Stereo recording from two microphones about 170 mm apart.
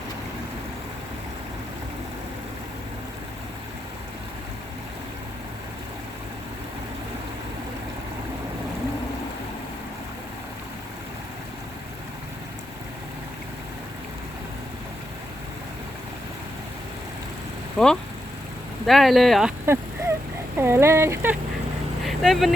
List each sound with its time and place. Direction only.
17.8 s speech: centre (ahead or behind)
19.6 s a sound: 15° right (ahead or behind)
20.6 s speech: 15° right (ahead or behind)
22.0 s speech: centre (ahead or behind)